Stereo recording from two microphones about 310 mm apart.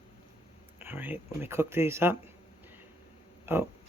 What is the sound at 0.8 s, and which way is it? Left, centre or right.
Speech, centre.